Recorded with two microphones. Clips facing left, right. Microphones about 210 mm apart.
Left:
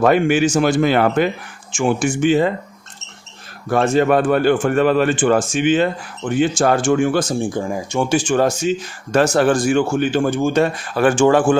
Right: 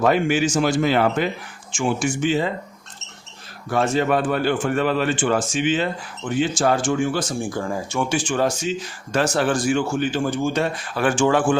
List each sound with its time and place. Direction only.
0.0 s speech: 55° left (ahead or behind)
3.7 s speech: 50° left (ahead or behind)
7.4 s speech: 20° left (ahead or behind)
8.1 s speech: 45° left (ahead or behind)